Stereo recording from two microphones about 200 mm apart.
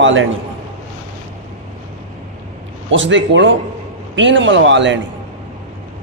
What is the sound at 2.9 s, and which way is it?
A man's voice, 65° right (ahead or behind).